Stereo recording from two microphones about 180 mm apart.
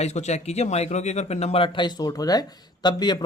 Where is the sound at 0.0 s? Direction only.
40° left (ahead or behind).